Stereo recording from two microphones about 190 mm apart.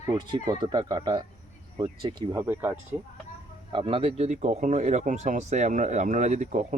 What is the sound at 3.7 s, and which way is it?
Speech, 25° right (ahead or behind).